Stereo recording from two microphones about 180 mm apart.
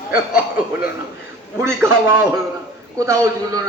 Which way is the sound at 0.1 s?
10° right (ahead or behind).